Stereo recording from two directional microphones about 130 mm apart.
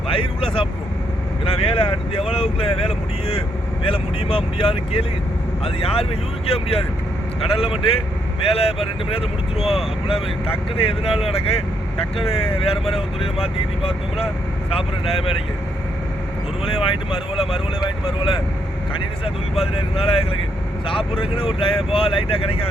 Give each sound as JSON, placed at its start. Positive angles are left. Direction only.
{"t": 0.1, "sound": "speech", "side_deg": 45}
{"t": 16.6, "sound": "speech", "side_deg": 45}